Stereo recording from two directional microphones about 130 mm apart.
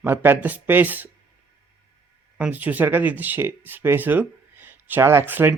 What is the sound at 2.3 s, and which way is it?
Speech, 10° right (ahead or behind).